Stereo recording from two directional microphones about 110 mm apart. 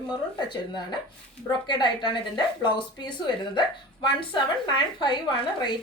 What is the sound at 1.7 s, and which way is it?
A woman's voice, 45° left (ahead or behind).